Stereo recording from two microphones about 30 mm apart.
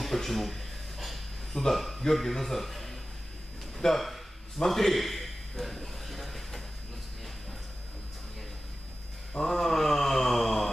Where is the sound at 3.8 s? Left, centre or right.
Centre.